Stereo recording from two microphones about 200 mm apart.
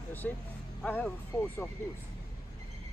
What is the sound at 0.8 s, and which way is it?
Speech, 5° left (ahead or behind).